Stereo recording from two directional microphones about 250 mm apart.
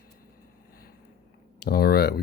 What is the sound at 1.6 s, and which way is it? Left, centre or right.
Speech, left.